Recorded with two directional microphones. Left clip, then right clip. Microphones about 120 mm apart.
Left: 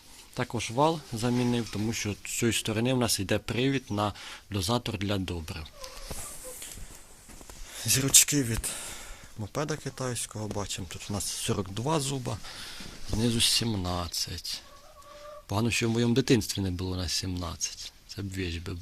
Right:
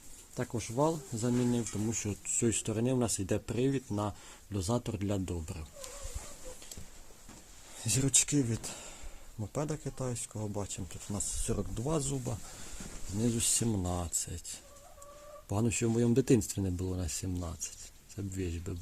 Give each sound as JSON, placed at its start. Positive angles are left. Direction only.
{"t": 0.3, "sound": "speech", "side_deg": 25}
{"t": 1.9, "sound": "speech", "side_deg": 0}
{"t": 7.8, "sound": "speech", "side_deg": -10}
{"t": 11.1, "sound": "speech", "side_deg": 20}
{"t": 11.9, "sound": "speech", "side_deg": 5}
{"t": 13.6, "sound": "speech", "side_deg": -20}
{"t": 15.5, "sound": "speech", "side_deg": -10}